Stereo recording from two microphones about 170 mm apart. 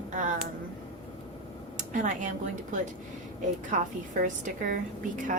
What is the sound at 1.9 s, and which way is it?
Speech, 50° right (ahead or behind).